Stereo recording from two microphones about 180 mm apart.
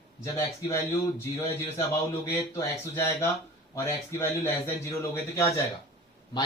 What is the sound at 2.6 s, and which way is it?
A man's voice, 15° left (ahead or behind).